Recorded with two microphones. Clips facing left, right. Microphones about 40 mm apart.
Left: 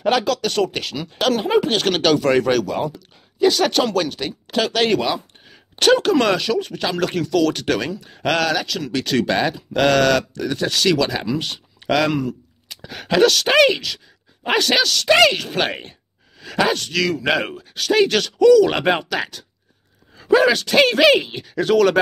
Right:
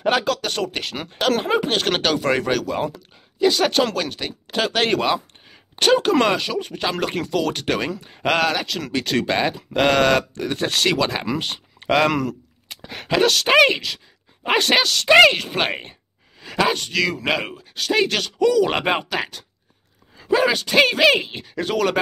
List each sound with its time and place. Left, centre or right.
0.0 s speech: centre
2.6 s speech: centre
2.9 s a woman's voice: centre
4.3 s speech: centre
12.1 s speech: right
12.9 s speech: centre; by 14.9 s right
14.9 s speech: centre
17.3 s speech: centre